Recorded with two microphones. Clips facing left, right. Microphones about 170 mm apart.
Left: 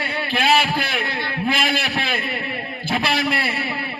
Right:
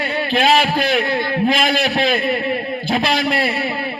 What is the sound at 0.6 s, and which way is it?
A man's voice, 45° right (ahead or behind).